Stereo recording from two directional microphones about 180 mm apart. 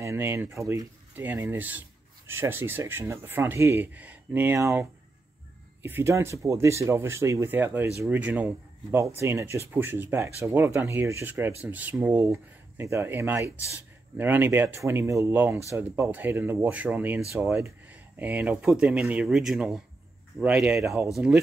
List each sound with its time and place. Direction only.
0.0 s speech: 15° right (ahead or behind)
20.8 s speech: 15° right (ahead or behind)